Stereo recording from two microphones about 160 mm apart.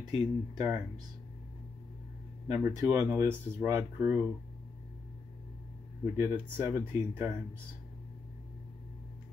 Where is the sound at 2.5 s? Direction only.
15° right (ahead or behind).